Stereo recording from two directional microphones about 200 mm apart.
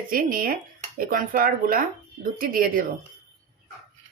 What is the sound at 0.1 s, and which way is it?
Speech, 45° right (ahead or behind).